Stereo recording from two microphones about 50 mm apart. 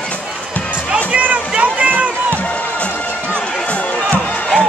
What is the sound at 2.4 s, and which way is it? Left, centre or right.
Music, left.